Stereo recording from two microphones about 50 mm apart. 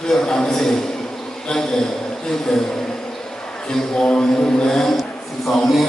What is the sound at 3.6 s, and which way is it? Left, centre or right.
Speech, centre.